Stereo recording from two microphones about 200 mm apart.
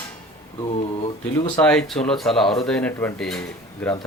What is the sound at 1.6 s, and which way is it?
Speech, 5° left (ahead or behind).